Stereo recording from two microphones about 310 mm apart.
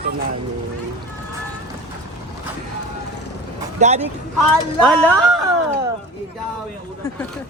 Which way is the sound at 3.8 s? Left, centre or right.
Right.